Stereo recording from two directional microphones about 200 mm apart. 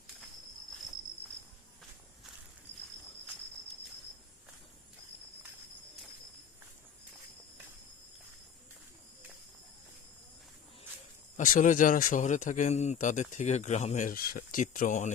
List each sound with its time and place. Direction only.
11.3 s a man's voice: 40° left (ahead or behind)